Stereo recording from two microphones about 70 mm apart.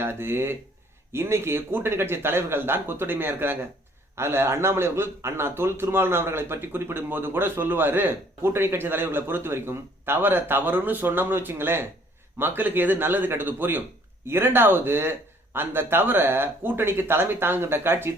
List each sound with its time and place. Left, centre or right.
0.0 s a man's voice: right